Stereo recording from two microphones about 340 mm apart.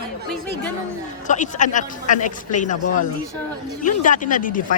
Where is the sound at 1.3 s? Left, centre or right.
Left.